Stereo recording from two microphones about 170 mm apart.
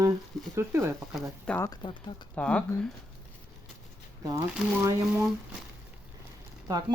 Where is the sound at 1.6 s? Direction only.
25° left (ahead or behind).